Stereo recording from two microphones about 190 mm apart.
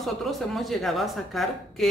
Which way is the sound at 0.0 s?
Centre (ahead or behind).